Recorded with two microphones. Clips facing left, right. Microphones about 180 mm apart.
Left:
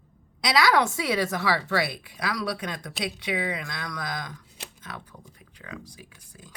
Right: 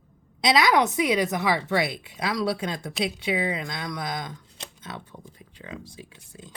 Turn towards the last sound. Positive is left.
turn(degrees=-25)  # may be behind; listen again after turning